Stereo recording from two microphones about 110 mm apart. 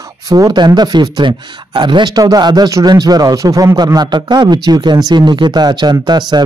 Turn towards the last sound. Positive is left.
turn(degrees=-40)  # may be behind; listen again after turning